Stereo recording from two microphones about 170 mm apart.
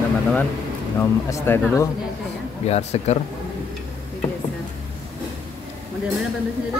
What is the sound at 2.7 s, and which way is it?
Speech, 40° left (ahead or behind).